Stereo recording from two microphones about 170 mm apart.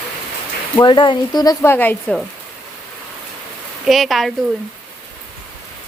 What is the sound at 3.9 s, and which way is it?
Speech, centre (ahead or behind).